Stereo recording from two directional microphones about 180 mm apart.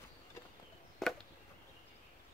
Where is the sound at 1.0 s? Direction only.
Centre (ahead or behind).